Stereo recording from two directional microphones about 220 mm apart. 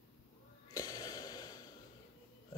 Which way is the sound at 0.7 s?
15° left (ahead or behind).